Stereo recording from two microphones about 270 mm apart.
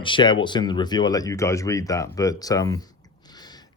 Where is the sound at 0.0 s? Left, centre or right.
Centre.